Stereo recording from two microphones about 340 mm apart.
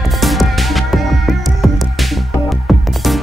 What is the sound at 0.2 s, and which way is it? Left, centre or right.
Music, centre.